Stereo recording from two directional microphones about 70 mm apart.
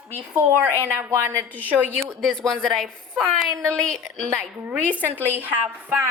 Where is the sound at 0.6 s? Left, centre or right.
Right.